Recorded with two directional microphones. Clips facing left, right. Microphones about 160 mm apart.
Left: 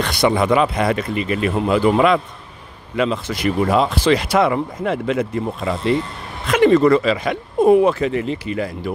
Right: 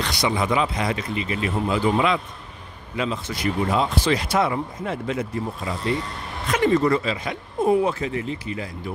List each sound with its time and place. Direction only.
0.0 s speech: 55° left (ahead or behind)
3.0 s speech: 75° left (ahead or behind)
6.4 s speech: 85° left